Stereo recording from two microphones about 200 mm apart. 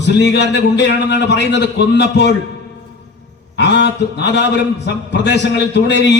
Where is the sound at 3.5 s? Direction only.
60° left (ahead or behind).